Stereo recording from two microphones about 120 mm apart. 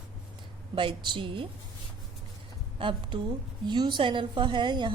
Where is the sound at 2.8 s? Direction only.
45° right (ahead or behind).